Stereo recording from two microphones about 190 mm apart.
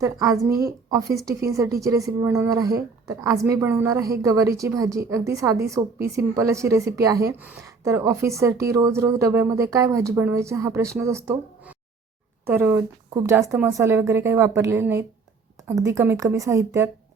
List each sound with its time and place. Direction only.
0.0 s a woman's voice: 15° right (ahead or behind)